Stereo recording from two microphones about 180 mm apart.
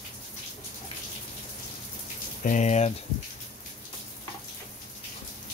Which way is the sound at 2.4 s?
40° left (ahead or behind).